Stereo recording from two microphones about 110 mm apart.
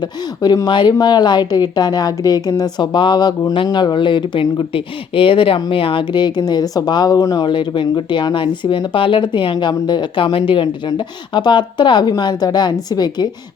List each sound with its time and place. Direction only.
0.4 s speech: 35° left (ahead or behind)